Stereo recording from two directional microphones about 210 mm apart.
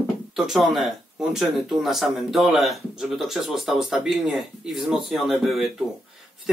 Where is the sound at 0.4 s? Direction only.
Centre (ahead or behind).